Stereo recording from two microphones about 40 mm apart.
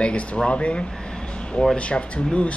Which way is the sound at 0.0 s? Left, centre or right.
Left.